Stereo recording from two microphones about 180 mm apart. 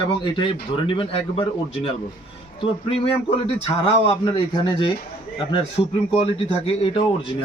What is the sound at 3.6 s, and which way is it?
Speech, 35° left (ahead or behind).